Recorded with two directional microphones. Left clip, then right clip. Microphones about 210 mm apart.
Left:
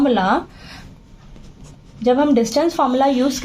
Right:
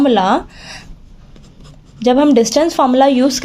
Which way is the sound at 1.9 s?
40° right (ahead or behind).